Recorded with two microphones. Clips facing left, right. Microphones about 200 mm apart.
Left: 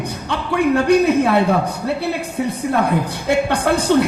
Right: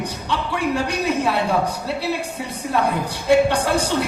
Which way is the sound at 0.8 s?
55° left (ahead or behind).